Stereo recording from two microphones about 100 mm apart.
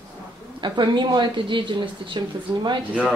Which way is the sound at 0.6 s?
50° right (ahead or behind).